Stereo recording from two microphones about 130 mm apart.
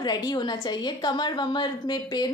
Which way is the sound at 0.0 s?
35° left (ahead or behind).